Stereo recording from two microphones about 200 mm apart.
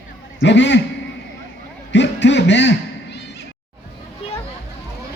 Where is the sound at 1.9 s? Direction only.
60° left (ahead or behind).